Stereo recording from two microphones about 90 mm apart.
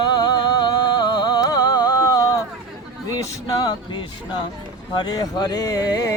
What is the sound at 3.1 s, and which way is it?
Speech, 45° left (ahead or behind).